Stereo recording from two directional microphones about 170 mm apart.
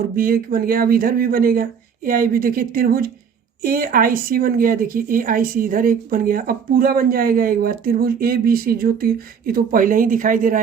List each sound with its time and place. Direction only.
0.2 s a woman's voice: 60° right (ahead or behind)